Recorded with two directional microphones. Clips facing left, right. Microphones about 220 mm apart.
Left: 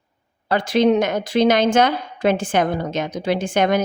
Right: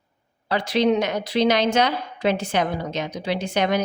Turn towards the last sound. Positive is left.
turn(degrees=50)  # may be behind; listen again after turning